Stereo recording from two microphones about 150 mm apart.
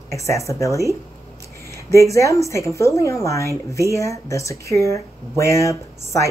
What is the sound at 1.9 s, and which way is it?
Speech, 20° left (ahead or behind).